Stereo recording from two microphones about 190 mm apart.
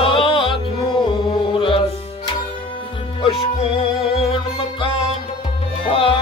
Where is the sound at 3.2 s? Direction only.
30° left (ahead or behind).